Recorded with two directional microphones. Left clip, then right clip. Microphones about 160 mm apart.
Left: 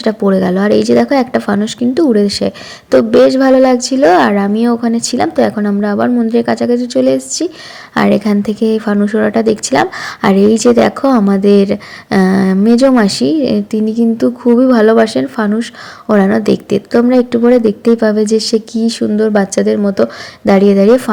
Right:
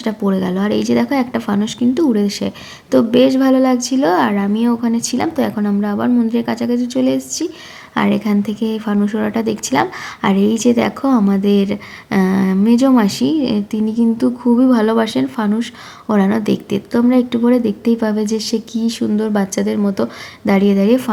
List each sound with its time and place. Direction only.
0.0 s a woman's voice: 25° left (ahead or behind)